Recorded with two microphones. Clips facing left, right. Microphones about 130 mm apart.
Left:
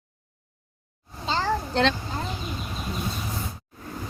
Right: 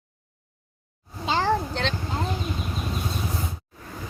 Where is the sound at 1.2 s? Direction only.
15° right (ahead or behind).